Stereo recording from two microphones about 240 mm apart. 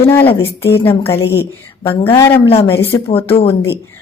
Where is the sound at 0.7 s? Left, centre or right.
Centre.